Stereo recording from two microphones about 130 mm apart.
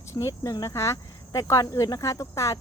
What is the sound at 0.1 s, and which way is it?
Speech, 20° left (ahead or behind).